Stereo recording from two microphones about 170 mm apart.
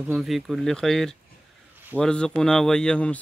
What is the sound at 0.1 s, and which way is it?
Speech, centre (ahead or behind).